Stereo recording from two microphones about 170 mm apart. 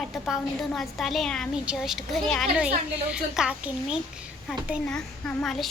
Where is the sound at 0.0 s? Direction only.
Centre (ahead or behind).